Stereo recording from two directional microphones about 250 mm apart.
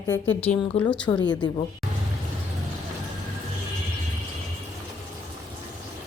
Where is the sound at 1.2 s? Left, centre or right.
Centre.